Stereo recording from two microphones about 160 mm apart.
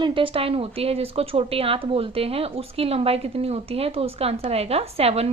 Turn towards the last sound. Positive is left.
turn(degrees=-40)  # may be behind; listen again after turning